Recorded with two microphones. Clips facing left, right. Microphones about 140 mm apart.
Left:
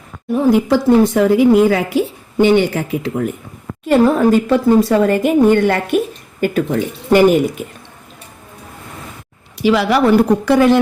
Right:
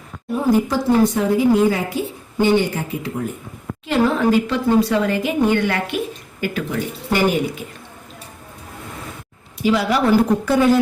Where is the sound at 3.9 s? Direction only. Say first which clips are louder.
Left 5 dB; 50° left (ahead or behind).